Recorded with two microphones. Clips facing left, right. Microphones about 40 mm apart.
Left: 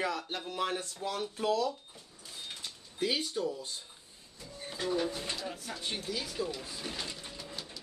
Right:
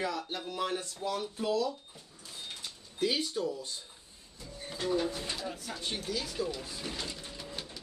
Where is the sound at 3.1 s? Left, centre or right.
Centre.